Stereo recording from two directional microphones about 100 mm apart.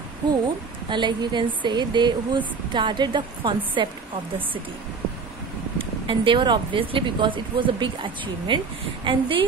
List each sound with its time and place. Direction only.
0.8 s speech: 50° right (ahead or behind)
5.8 s speech: 60° right (ahead or behind)